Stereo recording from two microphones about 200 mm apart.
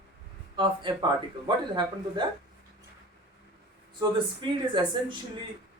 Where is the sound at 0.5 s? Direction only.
25° right (ahead or behind).